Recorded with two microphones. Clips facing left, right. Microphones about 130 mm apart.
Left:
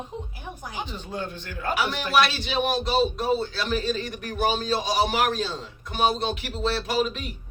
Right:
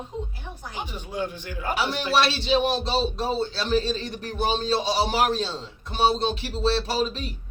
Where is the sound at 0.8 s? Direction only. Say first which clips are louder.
Right 3 dB; 10° right (ahead or behind).